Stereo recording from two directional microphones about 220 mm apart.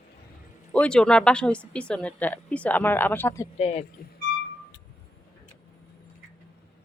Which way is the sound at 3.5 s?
30° left (ahead or behind).